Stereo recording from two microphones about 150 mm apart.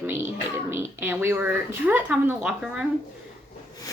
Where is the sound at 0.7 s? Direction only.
15° right (ahead or behind).